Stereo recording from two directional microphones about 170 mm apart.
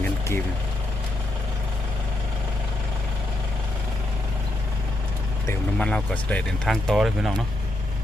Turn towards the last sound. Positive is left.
turn(degrees=0)  # may be behind; listen again after turning